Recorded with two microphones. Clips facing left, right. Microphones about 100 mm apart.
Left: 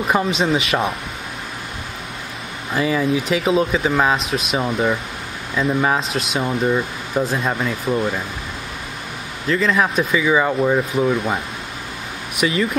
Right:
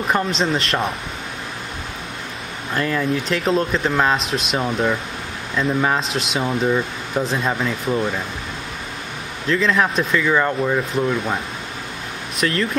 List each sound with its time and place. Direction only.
0.0 s speech: 5° left (ahead or behind)
2.7 s speech: 5° left (ahead or behind)
9.5 s speech: 5° left (ahead or behind)
12.4 s speech: 10° left (ahead or behind)